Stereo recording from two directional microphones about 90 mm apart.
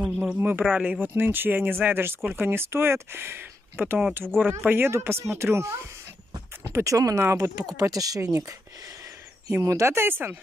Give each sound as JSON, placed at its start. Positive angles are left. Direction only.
{"t": 0.0, "sound": "speech", "side_deg": -10}
{"t": 0.4, "sound": "speech", "side_deg": -20}